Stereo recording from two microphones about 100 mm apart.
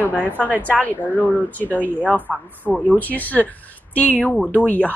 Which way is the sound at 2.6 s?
15° left (ahead or behind).